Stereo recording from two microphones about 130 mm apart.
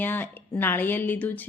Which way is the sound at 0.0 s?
15° left (ahead or behind).